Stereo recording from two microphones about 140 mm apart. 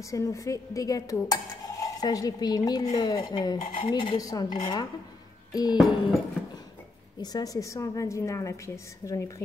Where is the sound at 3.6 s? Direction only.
60° left (ahead or behind).